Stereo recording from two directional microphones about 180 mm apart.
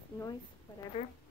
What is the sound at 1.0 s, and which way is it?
Speech, 35° left (ahead or behind).